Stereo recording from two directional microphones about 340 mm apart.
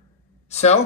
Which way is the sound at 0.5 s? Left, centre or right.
Centre.